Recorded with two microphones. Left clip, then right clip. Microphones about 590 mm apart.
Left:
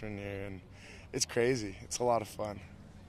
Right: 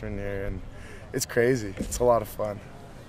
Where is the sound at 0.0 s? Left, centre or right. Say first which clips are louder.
Right 8 dB; left.